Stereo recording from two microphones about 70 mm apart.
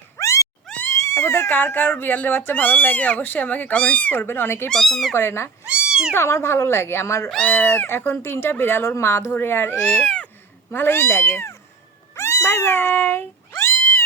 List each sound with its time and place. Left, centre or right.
0.2 s cat: left
0.9 s speech: left
4.7 s speech: centre
5.1 s speech: left
5.6 s cat: centre
6.1 s speech: left
7.4 s speech: left
9.9 s cat: centre
10.7 s speech: left
12.1 s cat: left